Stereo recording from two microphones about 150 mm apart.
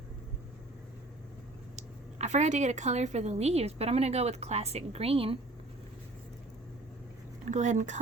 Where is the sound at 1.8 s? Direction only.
50° right (ahead or behind).